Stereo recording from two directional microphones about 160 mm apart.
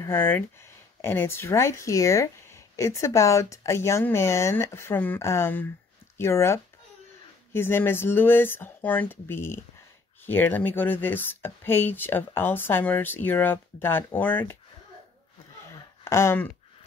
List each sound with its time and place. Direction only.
0.0 s speech: 15° left (ahead or behind)
16.0 s speech: 15° left (ahead or behind)